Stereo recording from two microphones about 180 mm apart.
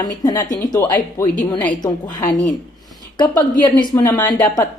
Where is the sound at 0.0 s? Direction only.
20° left (ahead or behind).